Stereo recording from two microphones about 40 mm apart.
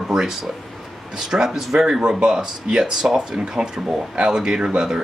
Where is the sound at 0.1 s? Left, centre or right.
Centre.